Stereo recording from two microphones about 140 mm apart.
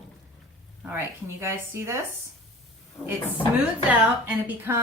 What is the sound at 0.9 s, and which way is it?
Speech, 20° right (ahead or behind).